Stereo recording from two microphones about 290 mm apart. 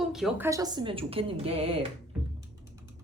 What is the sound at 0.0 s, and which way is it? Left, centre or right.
A woman's voice, centre.